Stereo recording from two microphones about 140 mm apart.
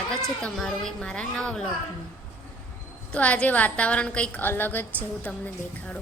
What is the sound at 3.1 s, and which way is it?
A woman's voice, 10° left (ahead or behind).